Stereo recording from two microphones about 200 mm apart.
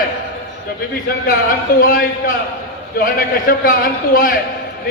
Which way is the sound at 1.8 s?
45° left (ahead or behind).